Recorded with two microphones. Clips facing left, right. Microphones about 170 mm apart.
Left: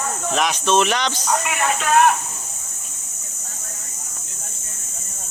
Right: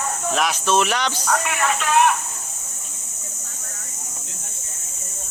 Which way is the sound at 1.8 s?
45° left (ahead or behind).